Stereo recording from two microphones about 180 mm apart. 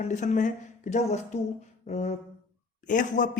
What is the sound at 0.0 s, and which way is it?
Speech, 40° left (ahead or behind).